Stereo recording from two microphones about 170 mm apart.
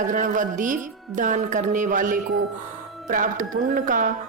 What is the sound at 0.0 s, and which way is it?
A woman's voice, 50° right (ahead or behind).